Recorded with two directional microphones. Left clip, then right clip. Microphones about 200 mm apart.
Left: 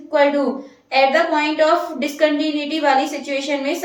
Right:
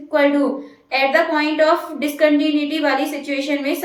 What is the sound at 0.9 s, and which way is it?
A woman's voice, 15° right (ahead or behind).